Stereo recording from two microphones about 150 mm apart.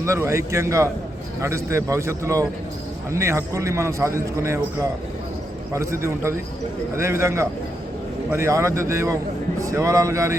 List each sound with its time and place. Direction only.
0.0 s a man's voice: 20° right (ahead or behind)